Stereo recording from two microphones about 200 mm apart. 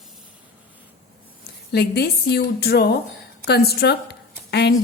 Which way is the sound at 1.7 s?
55° left (ahead or behind).